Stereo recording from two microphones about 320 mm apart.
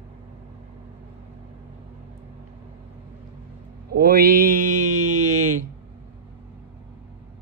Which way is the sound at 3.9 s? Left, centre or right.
Right.